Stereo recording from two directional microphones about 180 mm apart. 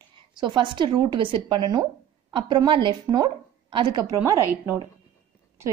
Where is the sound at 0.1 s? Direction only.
25° right (ahead or behind).